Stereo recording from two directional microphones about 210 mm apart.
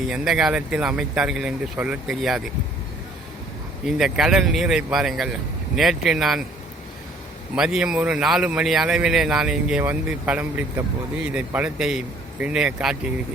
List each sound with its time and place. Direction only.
0.1 s a man's voice: centre (ahead or behind)
3.8 s a man's voice: centre (ahead or behind)
7.5 s a man's voice: 5° right (ahead or behind)